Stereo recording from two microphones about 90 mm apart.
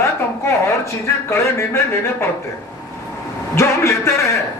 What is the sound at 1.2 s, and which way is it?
Speech, 30° left (ahead or behind).